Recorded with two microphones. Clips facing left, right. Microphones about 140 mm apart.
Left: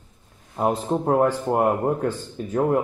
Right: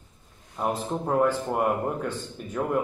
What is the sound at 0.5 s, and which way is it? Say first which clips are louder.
Speech: left 6 dB; 35° left (ahead or behind).